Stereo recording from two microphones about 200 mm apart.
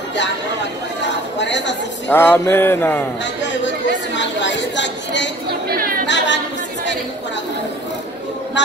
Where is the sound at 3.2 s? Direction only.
65° left (ahead or behind).